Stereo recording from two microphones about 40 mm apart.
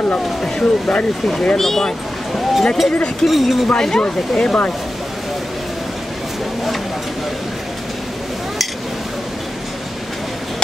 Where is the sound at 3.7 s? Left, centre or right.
Centre.